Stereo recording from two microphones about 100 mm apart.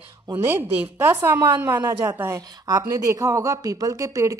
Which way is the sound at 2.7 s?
40° right (ahead or behind).